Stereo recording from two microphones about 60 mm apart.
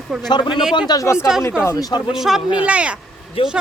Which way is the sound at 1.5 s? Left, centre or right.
Left.